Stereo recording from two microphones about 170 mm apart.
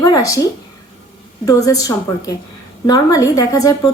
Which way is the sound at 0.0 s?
20° left (ahead or behind).